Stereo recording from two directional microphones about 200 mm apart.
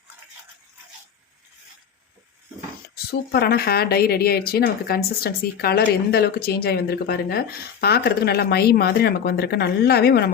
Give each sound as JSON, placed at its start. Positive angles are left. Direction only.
{"t": 2.9, "sound": "a woman's voice", "side_deg": 50}